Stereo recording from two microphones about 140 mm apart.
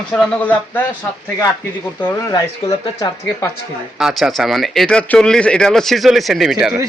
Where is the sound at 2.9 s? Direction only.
25° left (ahead or behind).